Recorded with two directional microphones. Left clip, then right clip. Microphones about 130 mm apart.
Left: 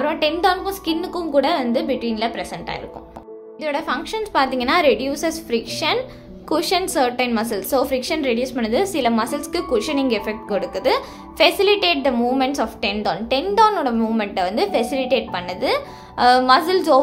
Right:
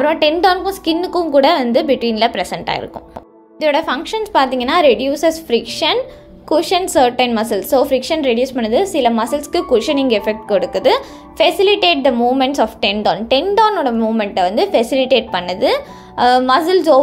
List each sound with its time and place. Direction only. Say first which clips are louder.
0.0 s a woman's voice: right 6 dB; 40° right (ahead or behind)
6.5 s a woman's voice: right 6 dB; 20° right (ahead or behind)